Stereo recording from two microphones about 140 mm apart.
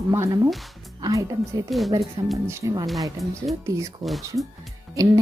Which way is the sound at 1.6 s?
Centre (ahead or behind).